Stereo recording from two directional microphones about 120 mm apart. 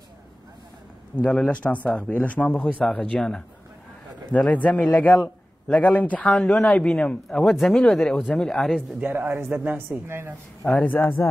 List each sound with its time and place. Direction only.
1.1 s a man's voice: 5° left (ahead or behind)
9.0 s speech: 15° right (ahead or behind)
10.6 s a man's voice: 10° left (ahead or behind)